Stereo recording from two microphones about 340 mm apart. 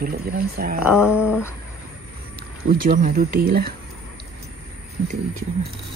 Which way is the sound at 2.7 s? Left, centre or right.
Right.